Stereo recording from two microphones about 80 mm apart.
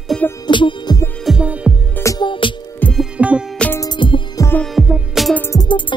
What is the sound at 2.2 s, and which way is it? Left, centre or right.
Music, left.